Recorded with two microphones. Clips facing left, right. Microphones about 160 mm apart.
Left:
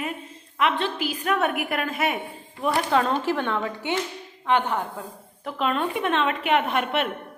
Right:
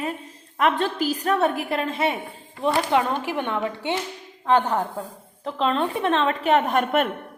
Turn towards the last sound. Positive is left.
turn(degrees=-45)  # may be behind; listen again after turning